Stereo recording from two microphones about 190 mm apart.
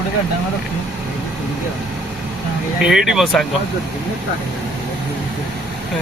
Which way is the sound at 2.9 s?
Centre (ahead or behind).